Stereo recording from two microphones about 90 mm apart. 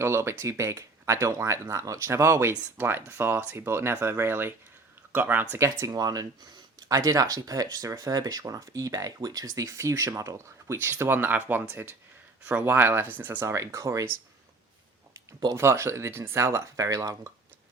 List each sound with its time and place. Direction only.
0.0 s speech: 30° right (ahead or behind)
5.9 s speech: 45° right (ahead or behind)
10.8 s speech: 25° right (ahead or behind)
13.5 s speech: 35° right (ahead or behind)
15.5 s speech: 30° right (ahead or behind)